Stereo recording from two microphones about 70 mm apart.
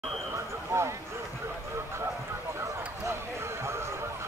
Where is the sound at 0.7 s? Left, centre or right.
Right.